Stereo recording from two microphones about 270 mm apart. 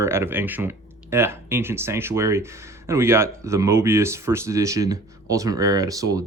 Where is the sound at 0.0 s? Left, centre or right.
Centre.